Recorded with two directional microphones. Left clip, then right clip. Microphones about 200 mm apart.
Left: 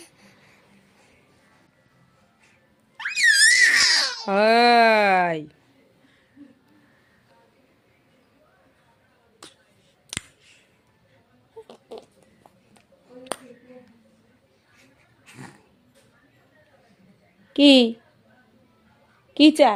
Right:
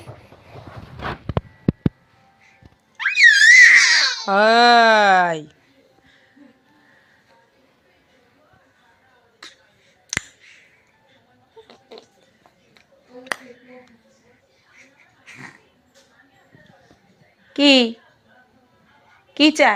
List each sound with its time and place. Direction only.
3.0 s crying: 25° left (ahead or behind)
10.1 s clicking: 20° left (ahead or behind)
11.7 s a sound: 25° left (ahead or behind)
15.2 s cat: 25° left (ahead or behind)
17.5 s a woman's voice: 25° left (ahead or behind)
19.3 s a woman's voice: 25° left (ahead or behind)